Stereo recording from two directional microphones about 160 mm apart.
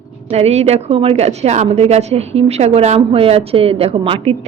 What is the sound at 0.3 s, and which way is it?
A woman's voice, 40° right (ahead or behind).